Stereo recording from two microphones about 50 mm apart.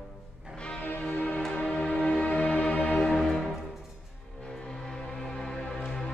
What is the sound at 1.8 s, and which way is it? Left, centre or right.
Music, centre.